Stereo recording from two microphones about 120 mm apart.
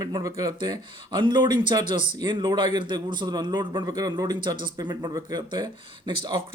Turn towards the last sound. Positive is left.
turn(degrees=-35)  # may be behind; listen again after turning